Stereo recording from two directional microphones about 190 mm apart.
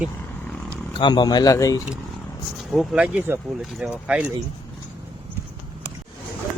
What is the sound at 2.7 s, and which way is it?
Speech, 5° right (ahead or behind).